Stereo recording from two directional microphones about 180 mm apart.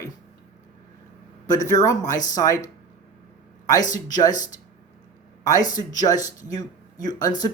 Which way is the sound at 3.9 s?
20° left (ahead or behind).